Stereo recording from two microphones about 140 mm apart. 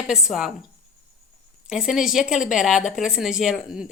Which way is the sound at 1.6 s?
5° right (ahead or behind).